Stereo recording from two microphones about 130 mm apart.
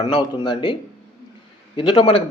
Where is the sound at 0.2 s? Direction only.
40° left (ahead or behind).